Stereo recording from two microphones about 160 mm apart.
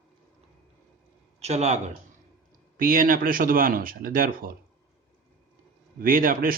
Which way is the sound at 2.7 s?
60° right (ahead or behind).